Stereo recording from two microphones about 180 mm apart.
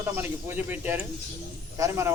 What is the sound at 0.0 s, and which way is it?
A man's voice, 10° right (ahead or behind).